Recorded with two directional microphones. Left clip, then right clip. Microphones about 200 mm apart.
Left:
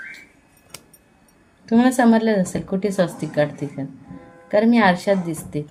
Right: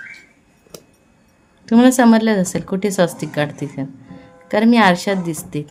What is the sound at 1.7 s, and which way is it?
Speech, 25° right (ahead or behind).